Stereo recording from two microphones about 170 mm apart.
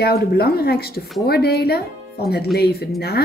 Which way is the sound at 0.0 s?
65° left (ahead or behind).